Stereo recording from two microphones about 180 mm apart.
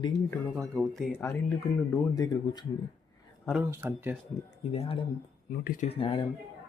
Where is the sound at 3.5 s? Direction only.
10° right (ahead or behind).